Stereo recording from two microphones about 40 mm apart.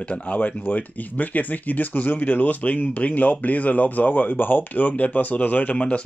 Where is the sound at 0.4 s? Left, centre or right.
Left.